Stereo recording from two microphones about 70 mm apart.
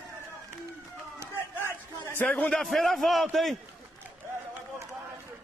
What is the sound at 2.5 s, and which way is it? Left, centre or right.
A man's voice, centre.